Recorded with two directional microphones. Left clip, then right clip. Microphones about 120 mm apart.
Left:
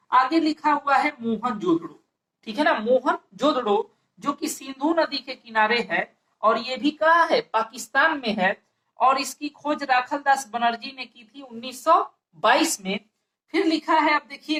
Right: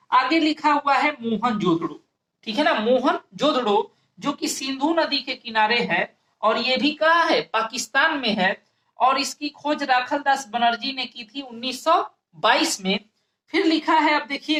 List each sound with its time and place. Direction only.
0.1 s speech: 35° right (ahead or behind)